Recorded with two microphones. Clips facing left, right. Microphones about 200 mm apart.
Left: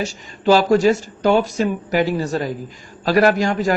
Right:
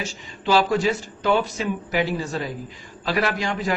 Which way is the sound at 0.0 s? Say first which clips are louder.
Left 8 dB; 40° left (ahead or behind).